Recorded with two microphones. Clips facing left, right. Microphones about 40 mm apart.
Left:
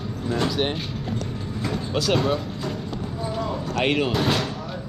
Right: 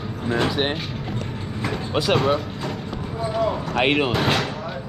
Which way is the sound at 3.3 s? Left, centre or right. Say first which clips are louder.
Right 5 dB; right.